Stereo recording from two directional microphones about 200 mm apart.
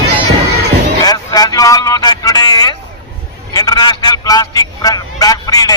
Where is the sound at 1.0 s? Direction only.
20° left (ahead or behind).